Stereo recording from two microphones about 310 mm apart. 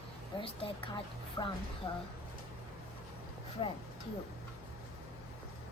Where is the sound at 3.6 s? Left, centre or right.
Centre.